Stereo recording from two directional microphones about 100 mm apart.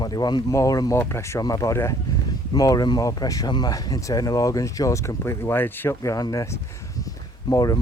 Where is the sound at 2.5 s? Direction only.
40° left (ahead or behind).